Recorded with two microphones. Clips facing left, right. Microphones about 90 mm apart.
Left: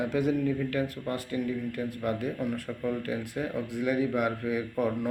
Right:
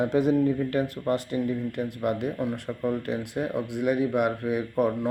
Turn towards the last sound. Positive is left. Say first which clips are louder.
# right 4 dB
turn(degrees=-20)  # may be behind; listen again after turning